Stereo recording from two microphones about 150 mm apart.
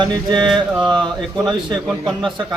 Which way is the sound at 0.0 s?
30° right (ahead or behind).